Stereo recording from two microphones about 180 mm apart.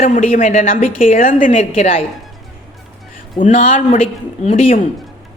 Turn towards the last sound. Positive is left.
turn(degrees=35)  # may be behind; listen again after turning